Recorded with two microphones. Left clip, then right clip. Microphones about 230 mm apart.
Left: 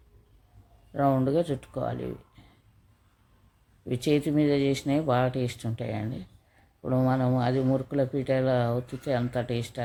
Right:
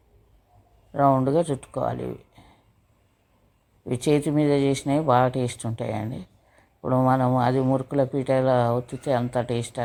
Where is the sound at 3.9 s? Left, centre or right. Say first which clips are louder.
Right 3 dB; centre.